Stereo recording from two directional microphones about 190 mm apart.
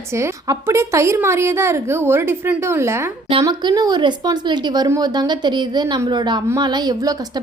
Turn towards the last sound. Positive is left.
turn(degrees=-20)  # may be behind; listen again after turning